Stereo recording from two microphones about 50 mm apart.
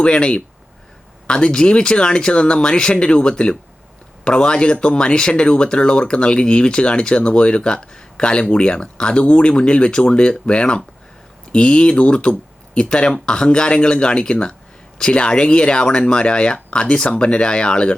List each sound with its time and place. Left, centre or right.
0.0 s speech: centre